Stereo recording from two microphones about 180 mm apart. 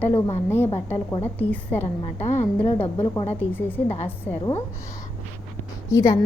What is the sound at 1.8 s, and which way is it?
Speech, 40° left (ahead or behind).